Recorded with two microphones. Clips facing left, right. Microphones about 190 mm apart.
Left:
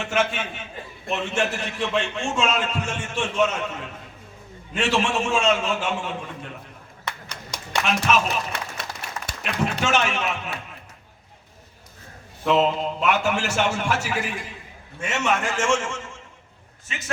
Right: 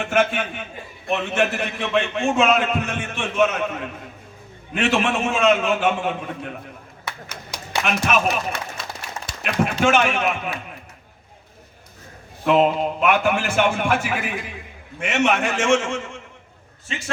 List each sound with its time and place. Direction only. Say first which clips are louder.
0.0 s a man's voice: right 4 dB; 55° right (ahead or behind)
7.0 s clapping: even; 5° right (ahead or behind)
7.9 s a man's voice: right 2 dB; 55° right (ahead or behind)
9.8 s a man's voice: right 6 dB; 55° right (ahead or behind)
12.5 s a man's voice: right 3 dB; 55° right (ahead or behind)